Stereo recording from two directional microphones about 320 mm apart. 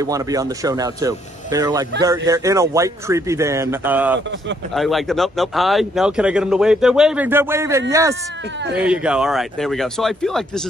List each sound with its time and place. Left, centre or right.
0.0 s a man's voice: centre